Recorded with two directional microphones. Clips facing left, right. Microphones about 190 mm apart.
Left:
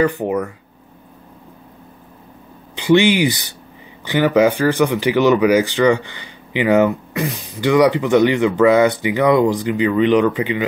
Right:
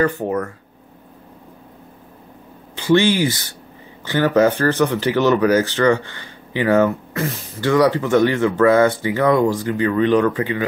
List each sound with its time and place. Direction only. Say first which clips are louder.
0.0 s speech: left 2 dB; 15° left (ahead or behind)
2.7 s speech: left 2 dB; 15° left (ahead or behind)